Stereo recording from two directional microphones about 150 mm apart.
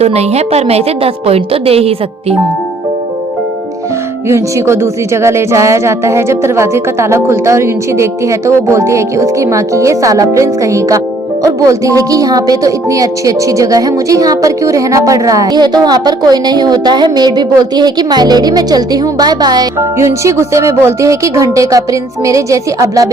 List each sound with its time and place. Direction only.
0.0 s a woman's voice: 45° right (ahead or behind)
4.3 s speech: 20° right (ahead or behind)